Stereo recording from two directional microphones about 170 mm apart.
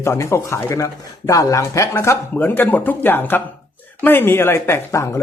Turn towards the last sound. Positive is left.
turn(degrees=20)  # may be behind; listen again after turning